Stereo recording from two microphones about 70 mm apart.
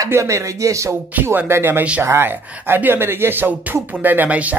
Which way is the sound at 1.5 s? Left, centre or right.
Right.